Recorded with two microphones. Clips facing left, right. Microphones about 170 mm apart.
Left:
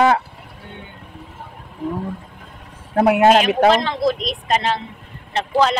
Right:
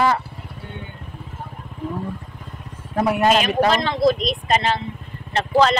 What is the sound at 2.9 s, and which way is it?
Speech, 70° left (ahead or behind).